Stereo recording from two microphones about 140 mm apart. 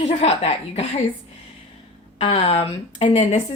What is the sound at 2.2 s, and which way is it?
Speech, 50° left (ahead or behind).